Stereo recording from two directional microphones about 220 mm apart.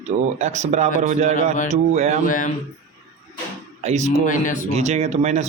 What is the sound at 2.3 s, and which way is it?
Speech, 35° left (ahead or behind).